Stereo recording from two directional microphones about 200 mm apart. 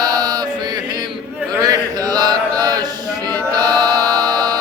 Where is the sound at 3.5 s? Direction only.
20° right (ahead or behind).